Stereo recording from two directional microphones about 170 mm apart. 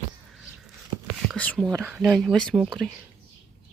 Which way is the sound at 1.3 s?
5° left (ahead or behind).